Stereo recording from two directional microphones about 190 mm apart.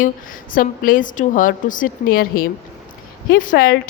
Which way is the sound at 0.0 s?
45° left (ahead or behind).